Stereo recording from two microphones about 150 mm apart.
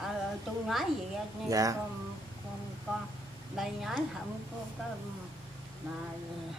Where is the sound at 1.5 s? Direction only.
25° right (ahead or behind).